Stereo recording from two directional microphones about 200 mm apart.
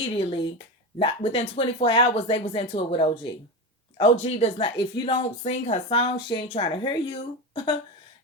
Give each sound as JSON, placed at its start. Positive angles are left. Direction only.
{"t": 0.0, "sound": "a woman's voice", "side_deg": 30}